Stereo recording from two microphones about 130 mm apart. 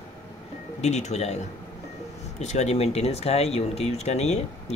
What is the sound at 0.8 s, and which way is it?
Speech, 60° left (ahead or behind).